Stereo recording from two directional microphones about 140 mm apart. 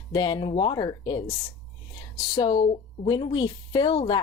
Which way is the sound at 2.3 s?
30° left (ahead or behind).